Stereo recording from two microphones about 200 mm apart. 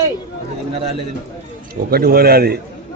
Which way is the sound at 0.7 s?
30° right (ahead or behind).